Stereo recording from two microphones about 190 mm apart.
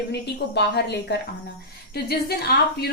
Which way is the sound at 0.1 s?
60° left (ahead or behind).